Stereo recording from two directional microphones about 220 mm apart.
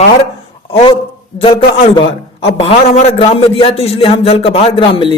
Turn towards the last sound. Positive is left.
turn(degrees=25)  # may be behind; listen again after turning